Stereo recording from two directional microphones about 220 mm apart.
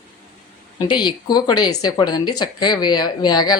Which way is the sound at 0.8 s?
20° left (ahead or behind).